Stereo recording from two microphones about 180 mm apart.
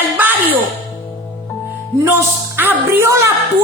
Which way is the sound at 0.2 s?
10° right (ahead or behind).